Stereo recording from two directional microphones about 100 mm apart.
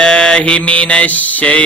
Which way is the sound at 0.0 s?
10° left (ahead or behind).